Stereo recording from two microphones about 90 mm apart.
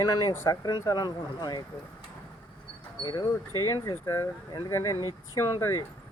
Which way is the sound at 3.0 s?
45° left (ahead or behind).